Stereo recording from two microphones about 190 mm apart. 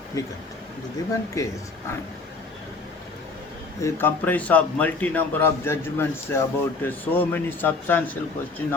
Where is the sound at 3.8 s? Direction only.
10° left (ahead or behind).